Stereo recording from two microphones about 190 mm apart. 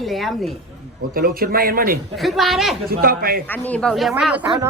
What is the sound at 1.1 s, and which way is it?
Speech, 50° right (ahead or behind).